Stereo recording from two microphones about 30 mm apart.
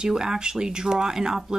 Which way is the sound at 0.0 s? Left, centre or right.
Right.